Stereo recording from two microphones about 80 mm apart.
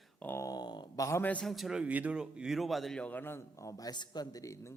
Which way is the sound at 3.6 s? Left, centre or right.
Left.